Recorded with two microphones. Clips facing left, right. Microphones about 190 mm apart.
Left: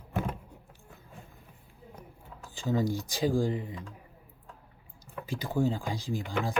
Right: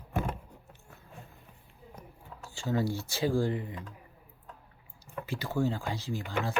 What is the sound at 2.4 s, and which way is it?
Speech, 15° left (ahead or behind).